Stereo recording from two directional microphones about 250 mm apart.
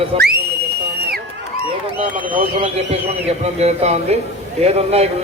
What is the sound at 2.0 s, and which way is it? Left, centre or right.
Speech, right.